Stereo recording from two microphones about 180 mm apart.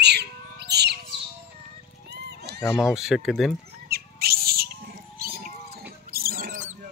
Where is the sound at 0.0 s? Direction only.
65° right (ahead or behind).